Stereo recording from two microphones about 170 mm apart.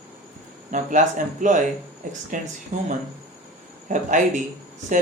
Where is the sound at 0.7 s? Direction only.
50° right (ahead or behind).